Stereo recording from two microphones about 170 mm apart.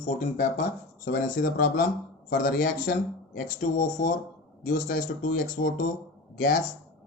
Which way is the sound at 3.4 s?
50° left (ahead or behind).